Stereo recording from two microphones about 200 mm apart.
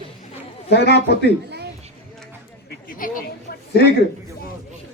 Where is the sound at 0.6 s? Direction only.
55° left (ahead or behind).